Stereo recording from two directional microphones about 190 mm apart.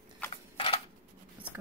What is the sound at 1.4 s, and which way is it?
Writing, 10° right (ahead or behind).